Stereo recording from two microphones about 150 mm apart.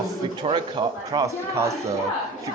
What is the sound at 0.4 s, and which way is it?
Speech, 30° right (ahead or behind).